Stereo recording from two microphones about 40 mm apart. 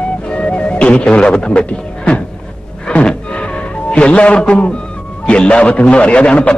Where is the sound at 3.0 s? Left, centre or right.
Left.